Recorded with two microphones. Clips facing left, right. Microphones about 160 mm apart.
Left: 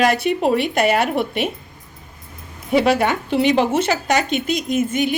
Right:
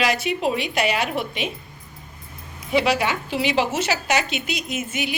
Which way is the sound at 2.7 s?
50° left (ahead or behind).